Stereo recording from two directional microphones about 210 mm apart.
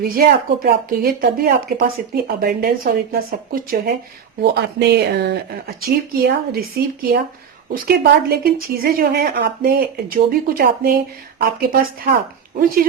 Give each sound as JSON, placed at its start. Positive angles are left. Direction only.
{"t": 0.2, "sound": "a woman's voice", "side_deg": -45}